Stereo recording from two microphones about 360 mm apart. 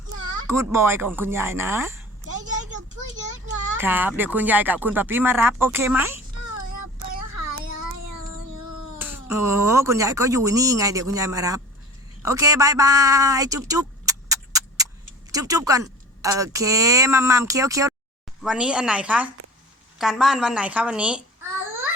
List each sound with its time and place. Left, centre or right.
0.4 s speech: centre
2.4 s a sound: right
3.8 s speech: centre
9.0 s speech: centre
13.7 s vehicle: centre
15.3 s a woman's voice: centre